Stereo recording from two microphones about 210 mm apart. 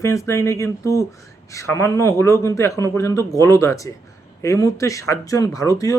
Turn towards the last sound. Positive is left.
turn(degrees=15)  # may be behind; listen again after turning